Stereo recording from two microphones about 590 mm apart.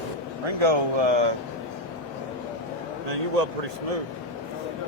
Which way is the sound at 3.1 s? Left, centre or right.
Right.